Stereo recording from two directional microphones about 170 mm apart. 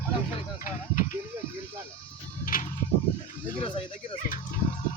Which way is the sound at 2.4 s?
50° left (ahead or behind).